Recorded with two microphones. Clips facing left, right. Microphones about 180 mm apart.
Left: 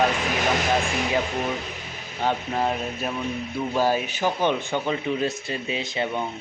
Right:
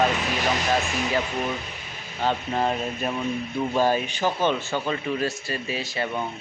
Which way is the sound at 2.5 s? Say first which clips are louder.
Even; 5° left (ahead or behind).